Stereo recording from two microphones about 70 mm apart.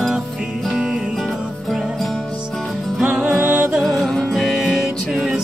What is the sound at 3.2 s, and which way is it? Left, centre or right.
Music, right.